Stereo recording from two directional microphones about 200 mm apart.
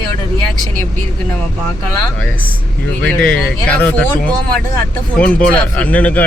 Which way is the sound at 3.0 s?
5° left (ahead or behind).